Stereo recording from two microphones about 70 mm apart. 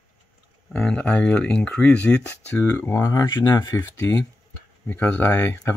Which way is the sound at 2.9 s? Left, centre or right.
Left.